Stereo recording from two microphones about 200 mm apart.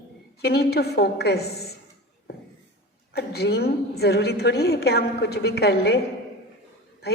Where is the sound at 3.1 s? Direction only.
55° left (ahead or behind).